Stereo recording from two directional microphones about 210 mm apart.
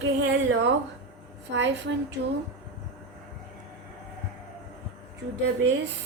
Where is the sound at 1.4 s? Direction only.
60° right (ahead or behind).